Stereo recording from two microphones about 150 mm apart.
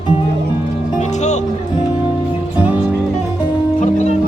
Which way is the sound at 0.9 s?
50° left (ahead or behind).